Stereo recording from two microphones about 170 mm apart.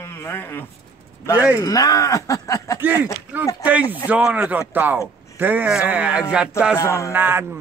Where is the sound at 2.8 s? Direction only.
10° right (ahead or behind).